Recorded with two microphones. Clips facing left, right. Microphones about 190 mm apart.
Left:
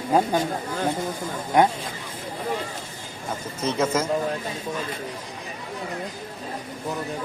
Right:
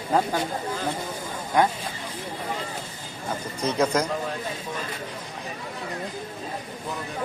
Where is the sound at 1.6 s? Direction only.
20° left (ahead or behind).